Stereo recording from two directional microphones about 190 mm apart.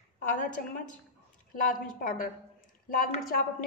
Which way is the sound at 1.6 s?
45° left (ahead or behind).